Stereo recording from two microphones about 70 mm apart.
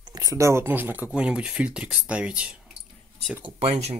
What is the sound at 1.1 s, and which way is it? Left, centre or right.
Speech, centre.